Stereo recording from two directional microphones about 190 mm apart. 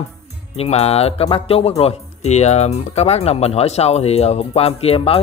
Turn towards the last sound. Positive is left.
turn(degrees=30)  # may be behind; listen again after turning